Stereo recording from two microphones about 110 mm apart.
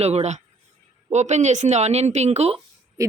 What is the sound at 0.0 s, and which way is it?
Speech, 75° right (ahead or behind).